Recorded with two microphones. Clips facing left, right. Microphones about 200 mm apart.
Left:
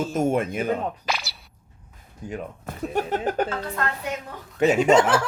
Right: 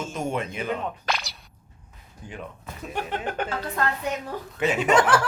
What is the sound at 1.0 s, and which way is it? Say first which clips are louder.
Speech: even; centre (ahead or behind).